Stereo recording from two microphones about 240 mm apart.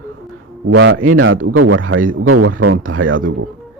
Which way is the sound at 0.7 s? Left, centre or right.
Right.